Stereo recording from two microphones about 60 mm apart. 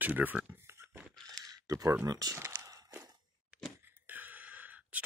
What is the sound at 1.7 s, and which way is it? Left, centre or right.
Speech, right.